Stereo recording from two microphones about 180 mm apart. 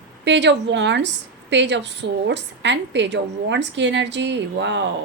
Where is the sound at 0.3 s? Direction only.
75° right (ahead or behind).